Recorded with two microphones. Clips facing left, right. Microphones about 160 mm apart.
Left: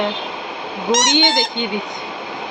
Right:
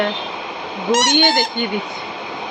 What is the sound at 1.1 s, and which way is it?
Speech, 15° left (ahead or behind).